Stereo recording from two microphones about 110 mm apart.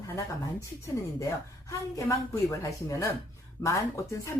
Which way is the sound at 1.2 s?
30° left (ahead or behind).